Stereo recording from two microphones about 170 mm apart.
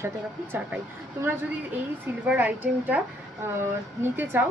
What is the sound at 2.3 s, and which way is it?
Speech, 10° right (ahead or behind).